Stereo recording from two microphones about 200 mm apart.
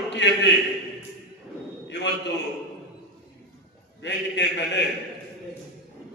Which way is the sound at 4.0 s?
60° left (ahead or behind).